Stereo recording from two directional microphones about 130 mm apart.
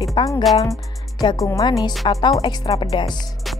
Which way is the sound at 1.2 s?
25° left (ahead or behind).